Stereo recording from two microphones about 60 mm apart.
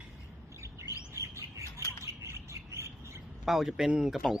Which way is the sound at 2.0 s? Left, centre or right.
Right.